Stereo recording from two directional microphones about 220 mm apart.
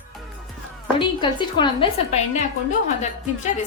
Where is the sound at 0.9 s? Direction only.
20° left (ahead or behind).